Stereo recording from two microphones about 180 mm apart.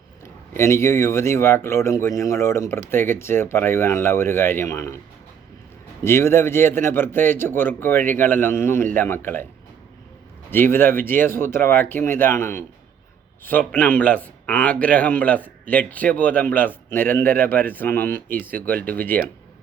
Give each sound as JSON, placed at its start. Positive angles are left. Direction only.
{"t": 0.5, "sound": "a man's voice", "side_deg": 15}
{"t": 6.0, "sound": "a man's voice", "side_deg": 15}
{"t": 10.5, "sound": "a man's voice", "side_deg": 10}